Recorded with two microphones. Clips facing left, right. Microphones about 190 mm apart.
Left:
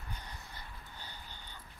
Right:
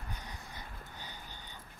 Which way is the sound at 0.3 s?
15° right (ahead or behind).